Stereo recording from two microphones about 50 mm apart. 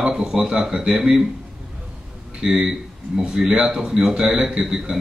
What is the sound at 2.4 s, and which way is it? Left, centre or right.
A man's voice, centre.